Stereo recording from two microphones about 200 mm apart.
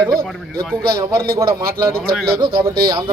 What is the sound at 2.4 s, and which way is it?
Speech, 25° right (ahead or behind).